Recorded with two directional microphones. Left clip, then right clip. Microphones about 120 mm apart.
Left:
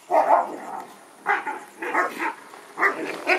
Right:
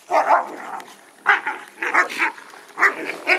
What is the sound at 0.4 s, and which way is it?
Dog, 15° left (ahead or behind).